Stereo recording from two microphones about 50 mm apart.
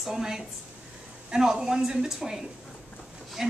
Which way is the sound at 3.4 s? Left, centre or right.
Centre.